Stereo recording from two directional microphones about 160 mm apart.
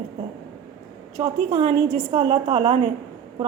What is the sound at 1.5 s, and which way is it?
A woman's voice, 30° right (ahead or behind).